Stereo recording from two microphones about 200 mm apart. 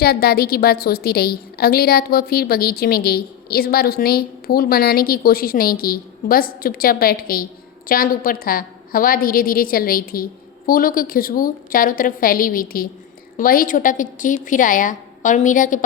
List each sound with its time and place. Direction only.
0.0 s a woman's voice: 50° left (ahead or behind)